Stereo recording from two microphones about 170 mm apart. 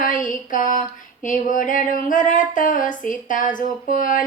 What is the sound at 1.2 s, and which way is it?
Speech, 50° left (ahead or behind).